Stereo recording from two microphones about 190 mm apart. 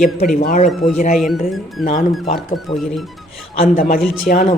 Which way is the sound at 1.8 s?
50° left (ahead or behind).